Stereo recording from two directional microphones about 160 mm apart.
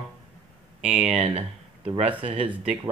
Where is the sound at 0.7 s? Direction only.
10° right (ahead or behind).